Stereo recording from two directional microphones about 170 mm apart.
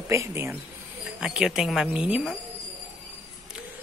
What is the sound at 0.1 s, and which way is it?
Speech, 15° right (ahead or behind).